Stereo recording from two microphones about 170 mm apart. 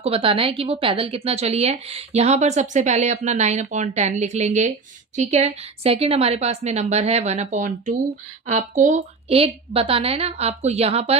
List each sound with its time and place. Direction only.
0.0 s a woman's voice: 35° right (ahead or behind)